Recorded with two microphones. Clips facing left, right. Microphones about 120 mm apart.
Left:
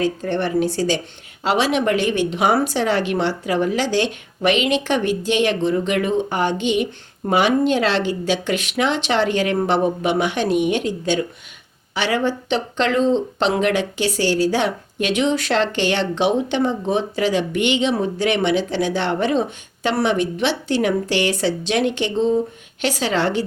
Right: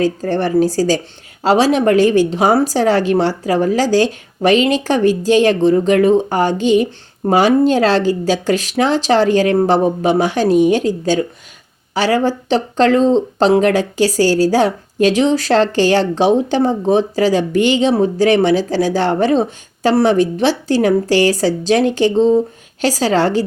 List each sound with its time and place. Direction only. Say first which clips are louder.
0.0 s speech: right 4 dB; 40° right (ahead or behind)